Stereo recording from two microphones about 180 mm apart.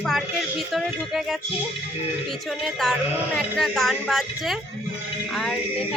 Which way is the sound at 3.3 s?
Centre (ahead or behind).